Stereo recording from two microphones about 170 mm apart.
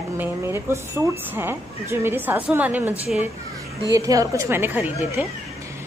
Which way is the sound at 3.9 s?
20° right (ahead or behind).